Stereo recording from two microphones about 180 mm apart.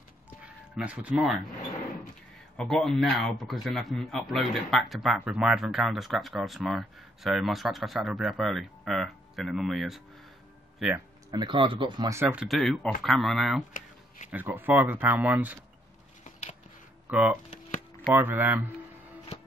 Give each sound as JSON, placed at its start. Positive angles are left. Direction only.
{"t": 0.4, "sound": "speech", "side_deg": -5}
{"t": 2.5, "sound": "speech", "side_deg": 0}
{"t": 11.3, "sound": "speech", "side_deg": -25}
{"t": 12.1, "sound": "speech", "side_deg": -10}
{"t": 12.4, "sound": "speech", "side_deg": 0}
{"t": 18.1, "sound": "speech", "side_deg": -10}